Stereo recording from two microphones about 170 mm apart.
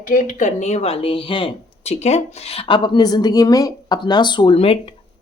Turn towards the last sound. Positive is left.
turn(degrees=35)  # may be behind; listen again after turning